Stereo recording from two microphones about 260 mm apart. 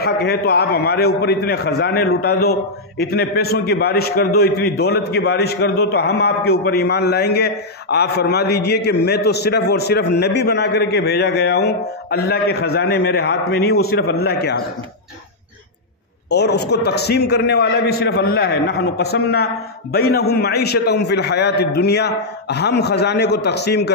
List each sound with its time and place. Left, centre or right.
0.0 s a man's voice: left
16.3 s a man's voice: left